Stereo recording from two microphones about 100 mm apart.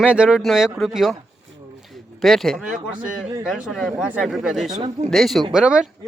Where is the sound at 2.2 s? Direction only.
Centre (ahead or behind).